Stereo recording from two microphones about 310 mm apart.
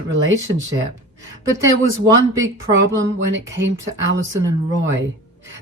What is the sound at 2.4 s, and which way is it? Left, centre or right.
Speech, right.